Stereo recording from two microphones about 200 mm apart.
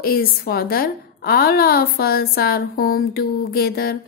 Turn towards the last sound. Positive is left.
turn(degrees=50)  # may be behind; listen again after turning